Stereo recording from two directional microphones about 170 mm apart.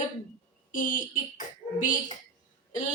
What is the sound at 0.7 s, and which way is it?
Speech, 50° left (ahead or behind).